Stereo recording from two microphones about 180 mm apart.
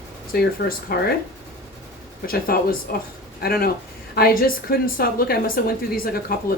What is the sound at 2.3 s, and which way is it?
A woman's voice, 55° left (ahead or behind).